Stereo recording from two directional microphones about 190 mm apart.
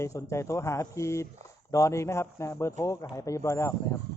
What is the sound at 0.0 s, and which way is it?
Speech, 15° left (ahead or behind).